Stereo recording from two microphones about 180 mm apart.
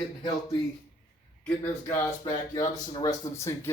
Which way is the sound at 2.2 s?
20° left (ahead or behind).